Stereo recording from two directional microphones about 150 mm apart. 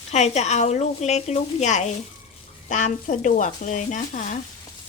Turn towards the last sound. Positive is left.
turn(degrees=55)  # may be behind; listen again after turning